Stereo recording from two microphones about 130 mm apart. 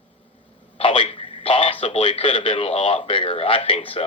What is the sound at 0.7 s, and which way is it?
Speech, 45° left (ahead or behind).